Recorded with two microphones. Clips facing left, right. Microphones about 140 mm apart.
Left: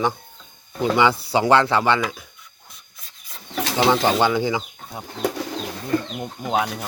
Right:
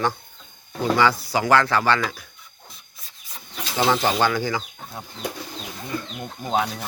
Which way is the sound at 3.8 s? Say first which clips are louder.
Left 2 dB; 15° left (ahead or behind).